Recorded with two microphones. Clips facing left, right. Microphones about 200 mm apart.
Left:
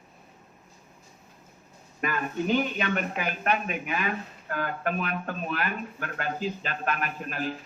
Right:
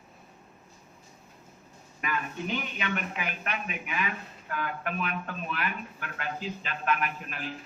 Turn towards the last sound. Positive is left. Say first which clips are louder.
# left 3 dB
turn(degrees=40)  # may be behind; listen again after turning